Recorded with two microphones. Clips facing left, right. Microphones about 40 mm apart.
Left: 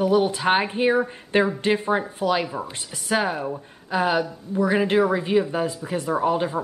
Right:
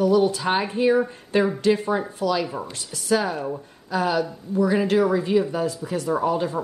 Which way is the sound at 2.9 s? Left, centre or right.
Left.